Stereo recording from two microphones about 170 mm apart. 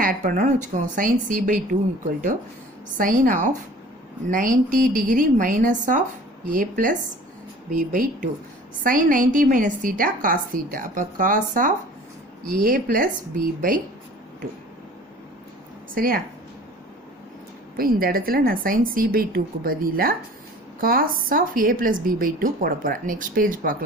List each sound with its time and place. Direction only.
0.0 s a woman's voice: 50° right (ahead or behind)
3.0 s a woman's voice: 55° right (ahead or behind)
16.0 s a woman's voice: 55° right (ahead or behind)
17.7 s a woman's voice: 60° right (ahead or behind)